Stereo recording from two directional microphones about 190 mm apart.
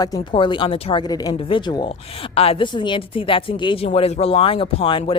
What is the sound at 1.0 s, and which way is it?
A woman's voice, 20° left (ahead or behind).